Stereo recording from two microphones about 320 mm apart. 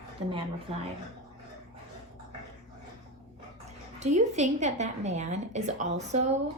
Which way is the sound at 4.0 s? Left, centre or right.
Right.